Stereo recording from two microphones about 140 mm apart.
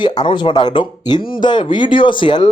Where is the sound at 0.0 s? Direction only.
30° left (ahead or behind).